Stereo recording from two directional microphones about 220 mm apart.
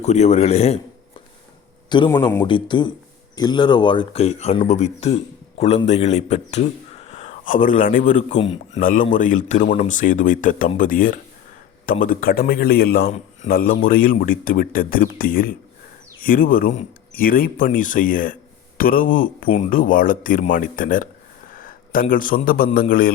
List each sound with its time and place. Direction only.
0.0 s speech: 30° left (ahead or behind)
1.9 s a man's voice: 20° left (ahead or behind); by 23.1 s 40° left (ahead or behind)